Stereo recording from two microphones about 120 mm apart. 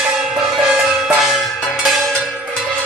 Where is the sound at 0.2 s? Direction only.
5° right (ahead or behind).